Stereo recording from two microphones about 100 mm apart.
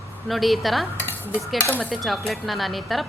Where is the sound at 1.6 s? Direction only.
20° left (ahead or behind).